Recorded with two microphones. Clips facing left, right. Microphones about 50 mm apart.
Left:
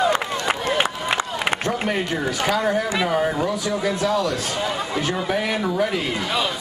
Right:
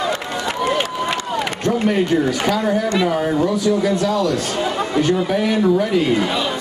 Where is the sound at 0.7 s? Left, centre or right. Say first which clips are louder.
Right 1 dB; centre.